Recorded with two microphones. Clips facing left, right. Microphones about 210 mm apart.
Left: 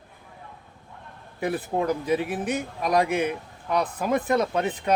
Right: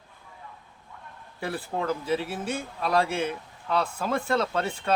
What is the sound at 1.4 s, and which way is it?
Speech, 20° left (ahead or behind).